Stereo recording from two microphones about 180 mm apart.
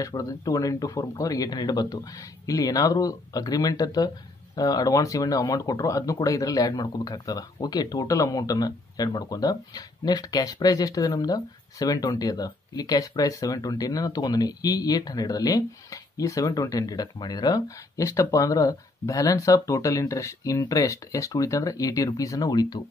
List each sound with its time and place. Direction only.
0.0 s speech: 20° left (ahead or behind)